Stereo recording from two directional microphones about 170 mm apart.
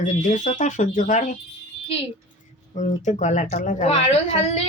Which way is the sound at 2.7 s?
45° left (ahead or behind).